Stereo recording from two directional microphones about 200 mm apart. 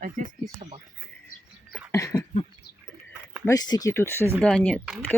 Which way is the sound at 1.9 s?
15° left (ahead or behind).